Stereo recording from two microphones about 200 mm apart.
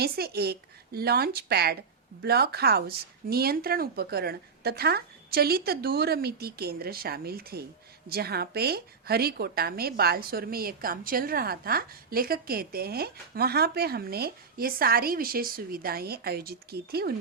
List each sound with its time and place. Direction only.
0.0 s a woman's voice: 50° right (ahead or behind)